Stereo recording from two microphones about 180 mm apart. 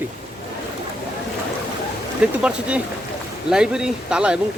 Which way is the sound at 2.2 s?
5° right (ahead or behind).